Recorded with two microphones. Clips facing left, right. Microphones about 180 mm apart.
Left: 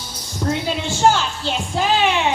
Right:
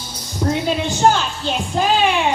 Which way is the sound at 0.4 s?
10° right (ahead or behind).